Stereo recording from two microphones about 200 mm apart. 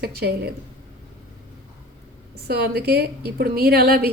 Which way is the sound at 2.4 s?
50° right (ahead or behind).